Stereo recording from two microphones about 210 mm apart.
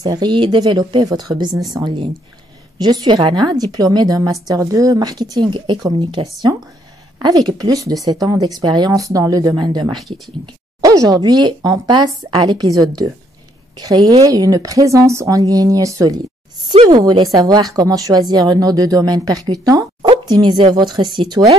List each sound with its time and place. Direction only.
0.0 s a woman's voice: 20° right (ahead or behind)
9.9 s speech: centre (ahead or behind)
10.8 s a woman's voice: 15° right (ahead or behind)